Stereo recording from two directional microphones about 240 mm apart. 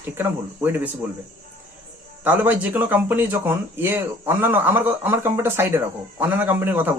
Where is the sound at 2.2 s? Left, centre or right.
Centre.